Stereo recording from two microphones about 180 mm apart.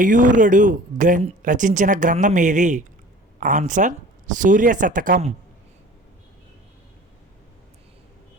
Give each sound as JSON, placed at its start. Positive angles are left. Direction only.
{"t": 0.0, "sound": "speech", "side_deg": -45}